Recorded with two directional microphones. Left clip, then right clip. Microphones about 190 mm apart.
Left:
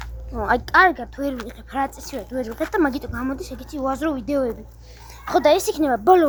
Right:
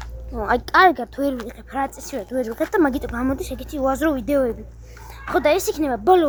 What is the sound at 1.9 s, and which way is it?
Speech, 10° right (ahead or behind).